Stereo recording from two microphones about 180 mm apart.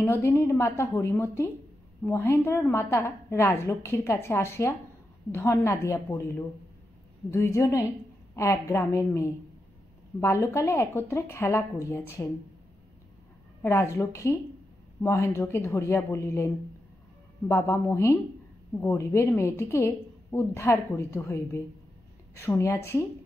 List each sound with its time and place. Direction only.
0.0 s a woman's voice: 15° left (ahead or behind)
13.6 s a woman's voice: 10° left (ahead or behind)